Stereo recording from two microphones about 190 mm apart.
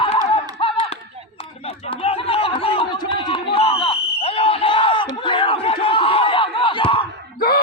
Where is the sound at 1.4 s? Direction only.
30° left (ahead or behind).